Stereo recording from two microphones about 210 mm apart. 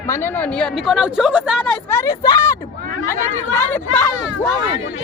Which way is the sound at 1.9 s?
15° left (ahead or behind).